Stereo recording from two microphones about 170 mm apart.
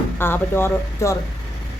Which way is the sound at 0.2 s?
15° left (ahead or behind).